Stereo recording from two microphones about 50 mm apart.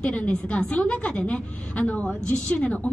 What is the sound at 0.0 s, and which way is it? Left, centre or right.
A woman's voice, left.